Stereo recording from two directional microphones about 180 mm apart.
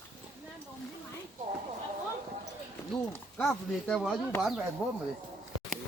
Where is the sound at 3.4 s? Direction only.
Centre (ahead or behind).